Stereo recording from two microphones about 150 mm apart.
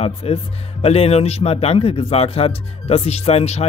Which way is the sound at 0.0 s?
40° left (ahead or behind).